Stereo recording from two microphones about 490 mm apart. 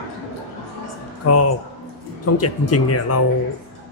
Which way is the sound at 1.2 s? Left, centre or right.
Left.